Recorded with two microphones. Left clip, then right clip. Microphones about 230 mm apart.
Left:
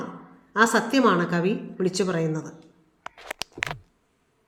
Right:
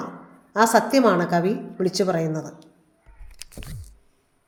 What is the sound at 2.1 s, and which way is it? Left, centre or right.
Speech, centre.